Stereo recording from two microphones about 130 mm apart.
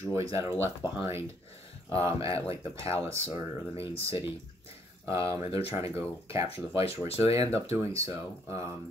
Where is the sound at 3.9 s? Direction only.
50° left (ahead or behind).